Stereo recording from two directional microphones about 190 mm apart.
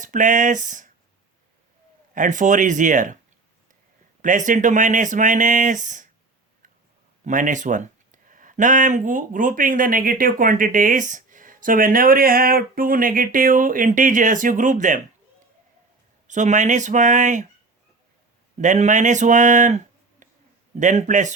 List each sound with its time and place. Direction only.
0.0 s speech: 40° right (ahead or behind)
2.1 s speech: 40° right (ahead or behind)
4.2 s speech: 40° right (ahead or behind)
7.3 s speech: 40° right (ahead or behind)
16.2 s speech: 40° right (ahead or behind)
18.5 s speech: 40° right (ahead or behind)